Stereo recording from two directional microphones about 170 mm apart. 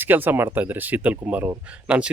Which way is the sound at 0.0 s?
10° right (ahead or behind).